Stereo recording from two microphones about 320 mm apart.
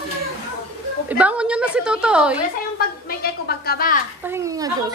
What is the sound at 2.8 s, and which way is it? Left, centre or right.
A woman's voice, left.